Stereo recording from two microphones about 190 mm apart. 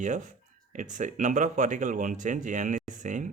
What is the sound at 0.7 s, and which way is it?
Speech, 40° right (ahead or behind).